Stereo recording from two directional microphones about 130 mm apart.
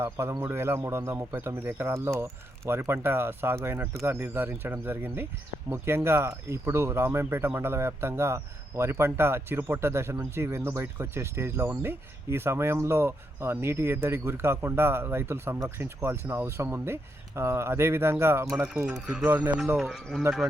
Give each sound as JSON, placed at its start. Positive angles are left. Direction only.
{"t": 0.0, "sound": "speech", "side_deg": -20}
{"t": 19.7, "sound": "speech", "side_deg": 0}